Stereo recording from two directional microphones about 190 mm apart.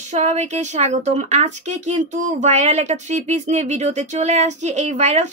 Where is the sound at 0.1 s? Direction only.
35° right (ahead or behind).